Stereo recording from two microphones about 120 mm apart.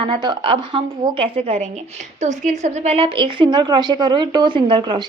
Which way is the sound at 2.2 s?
85° right.